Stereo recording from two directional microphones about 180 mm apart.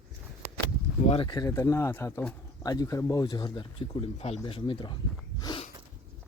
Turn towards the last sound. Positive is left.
turn(degrees=25)  # may be behind; listen again after turning